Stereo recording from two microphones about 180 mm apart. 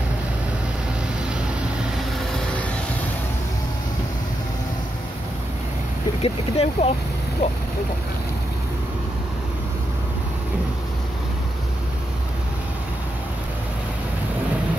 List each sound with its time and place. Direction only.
6.2 s speech: 35° left (ahead or behind)